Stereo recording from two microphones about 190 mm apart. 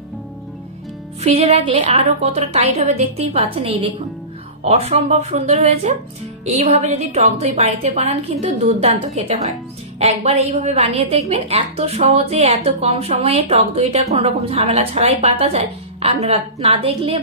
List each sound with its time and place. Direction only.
1.2 s a woman's voice: 35° right (ahead or behind)